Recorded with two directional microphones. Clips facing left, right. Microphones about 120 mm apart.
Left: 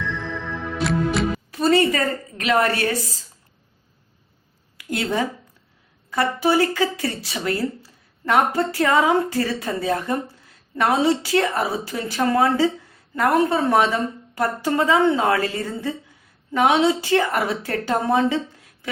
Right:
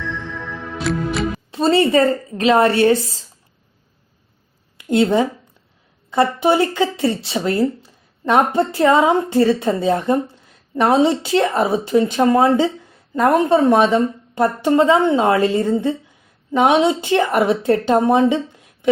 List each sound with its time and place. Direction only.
0.9 s music: centre (ahead or behind)
1.5 s speech: 25° right (ahead or behind)
4.8 s speech: 25° right (ahead or behind)